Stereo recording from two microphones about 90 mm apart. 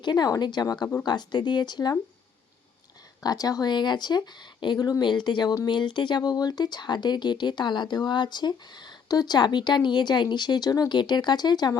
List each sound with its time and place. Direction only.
0.0 s speech: 50° left (ahead or behind)
3.2 s speech: 45° left (ahead or behind)